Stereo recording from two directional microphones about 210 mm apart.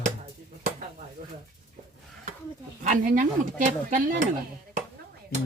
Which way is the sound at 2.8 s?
40° right (ahead or behind).